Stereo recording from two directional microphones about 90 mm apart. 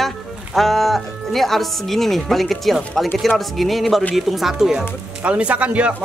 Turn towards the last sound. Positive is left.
turn(degrees=-15)  # may be behind; listen again after turning